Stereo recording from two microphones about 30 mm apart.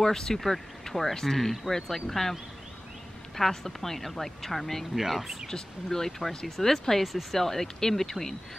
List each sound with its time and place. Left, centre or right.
0.0 s speech: centre
3.3 s speech: centre
4.9 s speech: centre
5.5 s speech: centre